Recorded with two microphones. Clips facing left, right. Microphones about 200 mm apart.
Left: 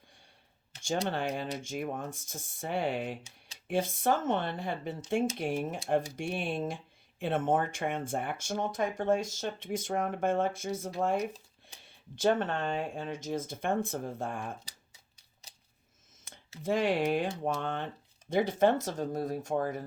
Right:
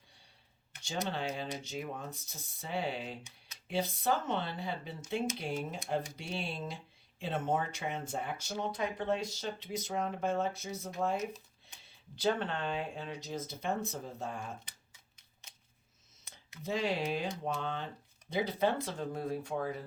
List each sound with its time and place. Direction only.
0.9 s speech: 55° left (ahead or behind)
16.2 s speech: 50° left (ahead or behind)